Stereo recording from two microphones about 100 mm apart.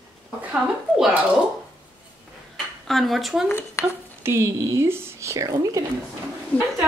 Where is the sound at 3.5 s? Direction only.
25° left (ahead or behind).